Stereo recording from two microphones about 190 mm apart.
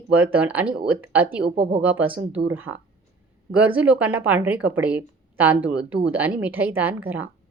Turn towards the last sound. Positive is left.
turn(degrees=-10)  # may be behind; listen again after turning